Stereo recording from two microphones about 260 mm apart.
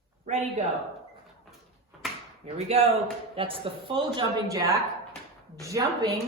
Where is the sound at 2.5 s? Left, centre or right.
Right.